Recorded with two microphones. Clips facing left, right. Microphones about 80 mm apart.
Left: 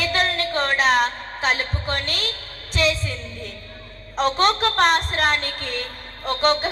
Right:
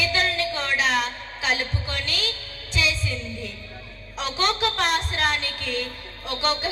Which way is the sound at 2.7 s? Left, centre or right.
Left.